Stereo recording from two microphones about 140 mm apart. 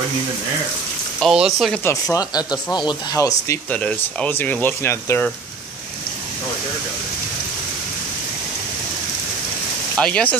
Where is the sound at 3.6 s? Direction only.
10° left (ahead or behind).